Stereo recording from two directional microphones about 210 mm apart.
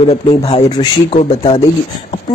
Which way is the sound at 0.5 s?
25° left (ahead or behind).